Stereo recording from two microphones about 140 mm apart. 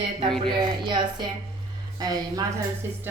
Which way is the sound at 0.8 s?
35° right (ahead or behind).